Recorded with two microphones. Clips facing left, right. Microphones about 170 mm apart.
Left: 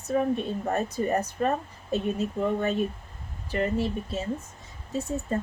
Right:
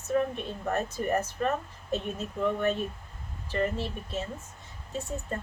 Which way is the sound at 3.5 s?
15° left (ahead or behind).